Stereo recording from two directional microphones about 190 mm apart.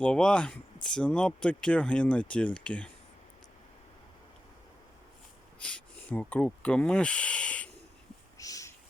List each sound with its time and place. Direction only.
0.0 s speech: 5° left (ahead or behind)
5.5 s speech: 5° left (ahead or behind)
8.4 s a sound: 20° left (ahead or behind)